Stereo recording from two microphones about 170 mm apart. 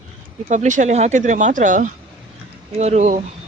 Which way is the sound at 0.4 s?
45° right (ahead or behind).